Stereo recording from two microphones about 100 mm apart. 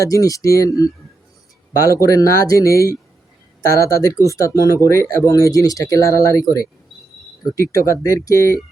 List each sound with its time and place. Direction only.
0.0 s speech: 35° left (ahead or behind)